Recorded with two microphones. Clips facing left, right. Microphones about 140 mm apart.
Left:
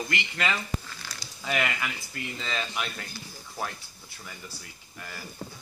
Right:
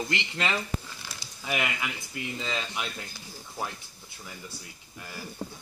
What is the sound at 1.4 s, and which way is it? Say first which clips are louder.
Speech: left 1 dB; 15° right (ahead or behind).